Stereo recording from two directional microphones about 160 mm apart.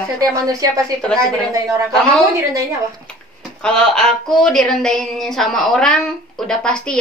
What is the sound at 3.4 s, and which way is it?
Speech, 5° left (ahead or behind).